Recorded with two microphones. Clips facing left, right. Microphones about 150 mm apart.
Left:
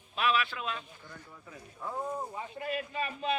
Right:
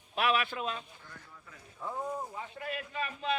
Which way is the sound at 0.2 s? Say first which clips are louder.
Even; 55° right (ahead or behind).